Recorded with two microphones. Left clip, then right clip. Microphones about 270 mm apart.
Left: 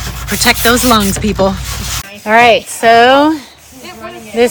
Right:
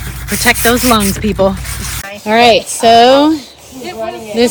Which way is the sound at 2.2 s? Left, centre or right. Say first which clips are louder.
Left 1 dB; left.